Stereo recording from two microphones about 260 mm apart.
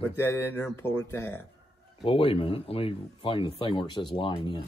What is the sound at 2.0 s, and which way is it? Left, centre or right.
Speech, left.